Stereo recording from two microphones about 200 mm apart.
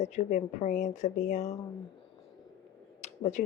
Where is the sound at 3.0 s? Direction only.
35° left (ahead or behind).